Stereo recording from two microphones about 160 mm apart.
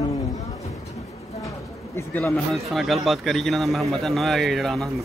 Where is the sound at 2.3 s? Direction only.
Centre (ahead or behind).